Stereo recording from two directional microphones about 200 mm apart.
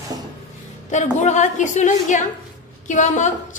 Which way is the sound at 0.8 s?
35° left (ahead or behind).